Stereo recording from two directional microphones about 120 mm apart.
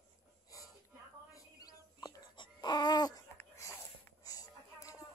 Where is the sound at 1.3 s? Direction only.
35° left (ahead or behind).